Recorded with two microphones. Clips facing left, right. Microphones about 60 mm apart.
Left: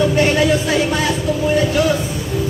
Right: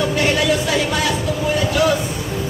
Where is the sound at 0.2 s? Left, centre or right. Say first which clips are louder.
Left 3 dB; left.